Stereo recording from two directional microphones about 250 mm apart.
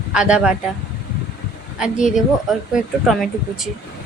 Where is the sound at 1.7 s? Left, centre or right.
Centre.